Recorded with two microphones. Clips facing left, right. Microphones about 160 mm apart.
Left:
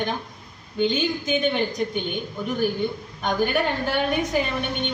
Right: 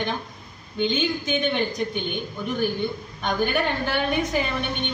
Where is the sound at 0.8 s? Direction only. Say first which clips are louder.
Left 1 dB; 40° left (ahead or behind).